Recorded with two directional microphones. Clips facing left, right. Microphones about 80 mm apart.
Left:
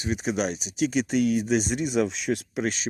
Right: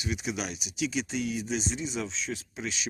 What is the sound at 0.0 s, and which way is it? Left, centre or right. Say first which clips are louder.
Speech: left 7 dB; left.